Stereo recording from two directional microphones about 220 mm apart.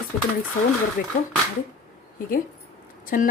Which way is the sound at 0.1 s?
40° left (ahead or behind).